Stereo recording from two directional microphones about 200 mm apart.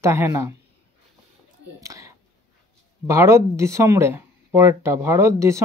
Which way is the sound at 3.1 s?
15° right (ahead or behind).